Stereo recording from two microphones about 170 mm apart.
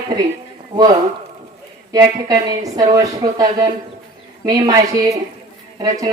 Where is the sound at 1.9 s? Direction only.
25° right (ahead or behind).